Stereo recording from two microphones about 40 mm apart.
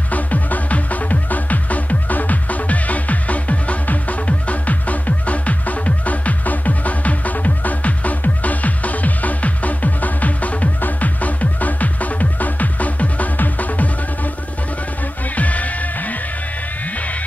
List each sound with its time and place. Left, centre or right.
0.1 s music: left
15.3 s music: left